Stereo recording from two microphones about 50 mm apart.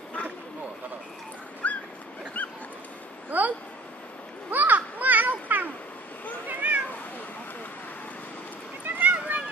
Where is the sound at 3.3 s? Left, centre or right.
Right.